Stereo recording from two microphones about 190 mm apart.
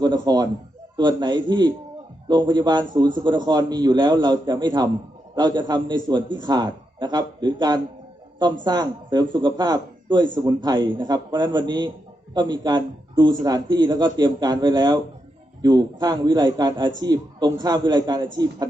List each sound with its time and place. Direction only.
0.0 s a man's voice: 20° right (ahead or behind)